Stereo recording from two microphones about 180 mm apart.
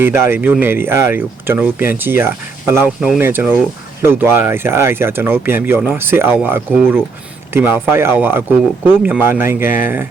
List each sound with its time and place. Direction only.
0.0 s speech: 15° right (ahead or behind)